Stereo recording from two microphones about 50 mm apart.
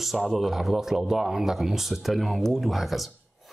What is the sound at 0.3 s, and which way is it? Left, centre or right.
A man's voice, centre.